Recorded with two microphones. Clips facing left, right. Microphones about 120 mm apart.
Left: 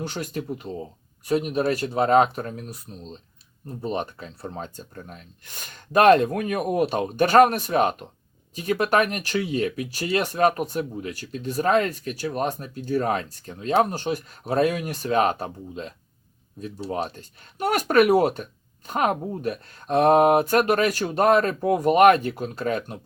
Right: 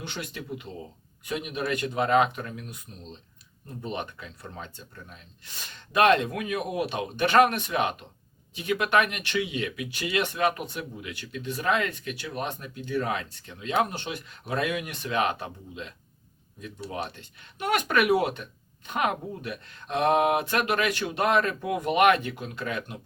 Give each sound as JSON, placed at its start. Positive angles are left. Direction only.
{"t": 0.0, "sound": "speech", "side_deg": 40}